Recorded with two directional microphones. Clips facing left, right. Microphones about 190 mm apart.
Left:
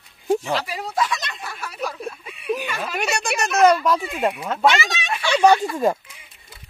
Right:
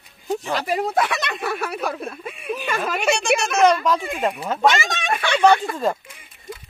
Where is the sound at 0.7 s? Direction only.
55° right (ahead or behind).